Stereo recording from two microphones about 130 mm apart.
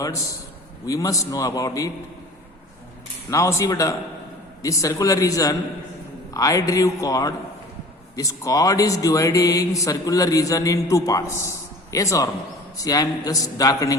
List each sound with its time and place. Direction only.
0.9 s speech: 25° left (ahead or behind)
3.2 s speech: 25° left (ahead or behind)